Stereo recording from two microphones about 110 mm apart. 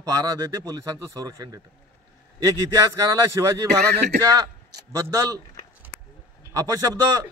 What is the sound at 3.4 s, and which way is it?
Speech, 30° right (ahead or behind).